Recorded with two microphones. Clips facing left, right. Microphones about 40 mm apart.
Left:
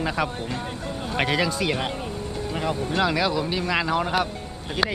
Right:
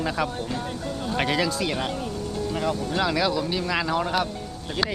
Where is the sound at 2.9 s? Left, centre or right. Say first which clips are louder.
Left 2 dB; centre.